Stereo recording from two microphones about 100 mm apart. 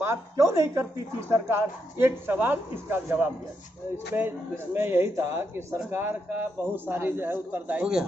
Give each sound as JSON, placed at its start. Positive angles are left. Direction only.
{"t": 0.0, "sound": "speech", "side_deg": -25}
{"t": 4.7, "sound": "speech", "side_deg": -25}